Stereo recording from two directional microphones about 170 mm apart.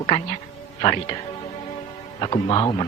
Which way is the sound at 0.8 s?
25° left (ahead or behind).